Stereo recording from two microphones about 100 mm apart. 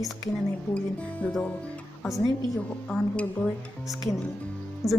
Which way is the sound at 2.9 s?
10° left (ahead or behind).